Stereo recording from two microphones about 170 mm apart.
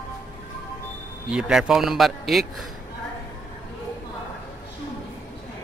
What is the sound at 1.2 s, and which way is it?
A man's voice, 5° right (ahead or behind).